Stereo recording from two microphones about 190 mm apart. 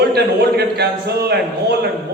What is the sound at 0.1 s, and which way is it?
A man's voice, 60° right (ahead or behind).